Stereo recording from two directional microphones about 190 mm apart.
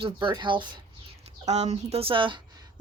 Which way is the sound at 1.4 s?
35° right (ahead or behind).